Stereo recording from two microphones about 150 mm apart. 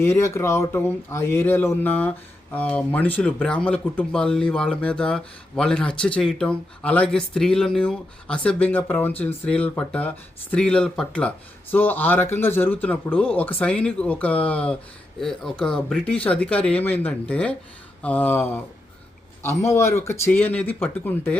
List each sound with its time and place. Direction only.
0.0 s speech: 20° left (ahead or behind)